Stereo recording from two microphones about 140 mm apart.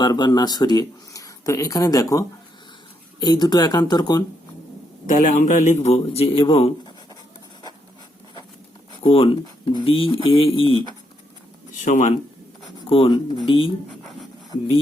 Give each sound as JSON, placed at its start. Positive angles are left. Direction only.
{"t": 0.0, "sound": "speech", "side_deg": 30}
{"t": 5.1, "sound": "speech", "side_deg": 70}
{"t": 8.9, "sound": "speech", "side_deg": 40}
{"t": 11.9, "sound": "speech", "side_deg": 60}
{"t": 12.9, "sound": "speech", "side_deg": 40}